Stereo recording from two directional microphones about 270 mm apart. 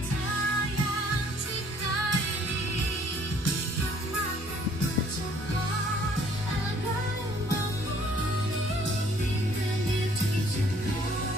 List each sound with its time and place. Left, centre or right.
1.8 s music: left